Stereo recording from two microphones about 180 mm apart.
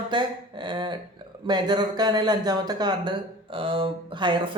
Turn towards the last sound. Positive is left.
turn(degrees=-25)  # may be behind; listen again after turning